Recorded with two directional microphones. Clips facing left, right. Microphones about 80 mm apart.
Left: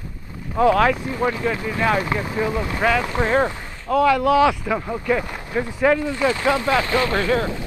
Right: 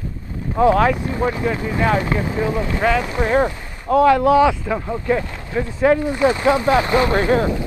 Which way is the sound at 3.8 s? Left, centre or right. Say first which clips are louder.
Right 3 dB; right.